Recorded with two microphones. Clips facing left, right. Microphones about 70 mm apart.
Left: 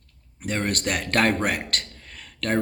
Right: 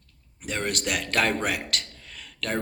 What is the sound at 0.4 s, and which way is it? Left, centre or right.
Speech, left.